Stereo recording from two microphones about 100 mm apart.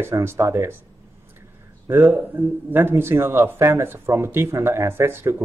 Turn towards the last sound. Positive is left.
turn(degrees=-25)  # may be behind; listen again after turning